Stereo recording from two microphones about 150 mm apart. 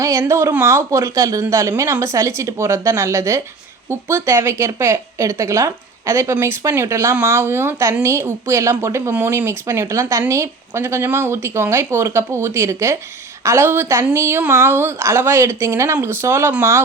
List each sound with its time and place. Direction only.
0.0 s a woman's voice: 20° right (ahead or behind)